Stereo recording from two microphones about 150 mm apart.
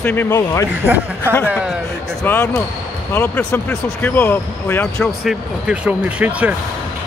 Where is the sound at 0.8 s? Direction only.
10° right (ahead or behind).